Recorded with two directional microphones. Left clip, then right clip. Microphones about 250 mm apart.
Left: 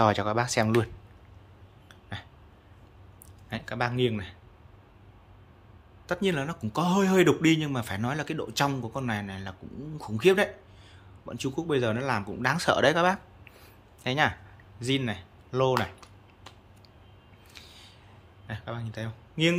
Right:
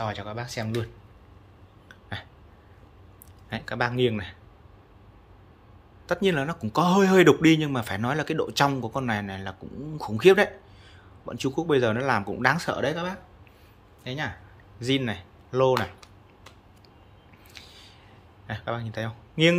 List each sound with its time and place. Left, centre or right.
0.0 s speech: left
1.9 s hiccup: centre
3.4 s speech: centre
6.0 s speech: centre
14.8 s speech: centre
17.5 s a sound: centre
18.5 s speech: centre